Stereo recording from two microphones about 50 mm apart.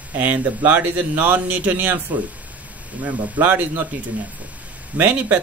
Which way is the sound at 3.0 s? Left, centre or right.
Right.